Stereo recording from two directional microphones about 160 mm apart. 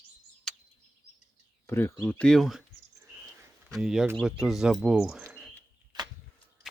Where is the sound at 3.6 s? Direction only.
Centre (ahead or behind).